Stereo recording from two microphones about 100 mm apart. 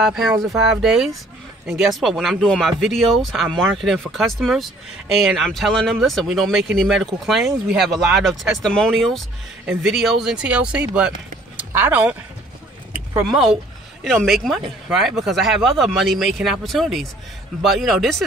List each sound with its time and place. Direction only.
0.0 s speech: 5° right (ahead or behind)
13.2 s speech: centre (ahead or behind)